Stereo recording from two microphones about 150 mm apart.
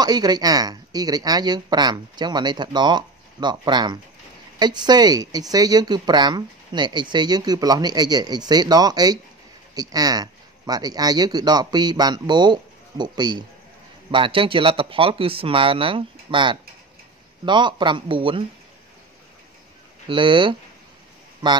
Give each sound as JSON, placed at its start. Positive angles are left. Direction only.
{"t": 0.0, "sound": "speech", "side_deg": -25}
{"t": 20.1, "sound": "speech", "side_deg": -35}